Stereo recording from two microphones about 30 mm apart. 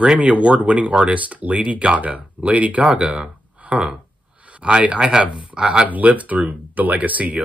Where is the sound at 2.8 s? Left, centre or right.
Right.